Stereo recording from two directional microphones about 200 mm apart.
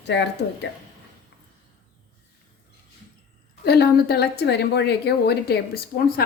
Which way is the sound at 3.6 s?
55° left (ahead or behind).